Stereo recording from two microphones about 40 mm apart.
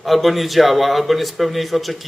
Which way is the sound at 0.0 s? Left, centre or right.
Centre.